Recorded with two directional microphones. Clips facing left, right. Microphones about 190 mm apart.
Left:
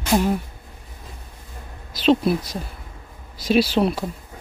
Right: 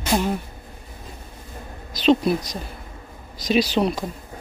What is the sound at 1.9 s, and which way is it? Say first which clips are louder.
Speech: even; 5° left (ahead or behind).